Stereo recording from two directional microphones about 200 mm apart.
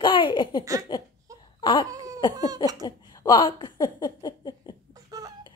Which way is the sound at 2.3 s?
20° right (ahead or behind).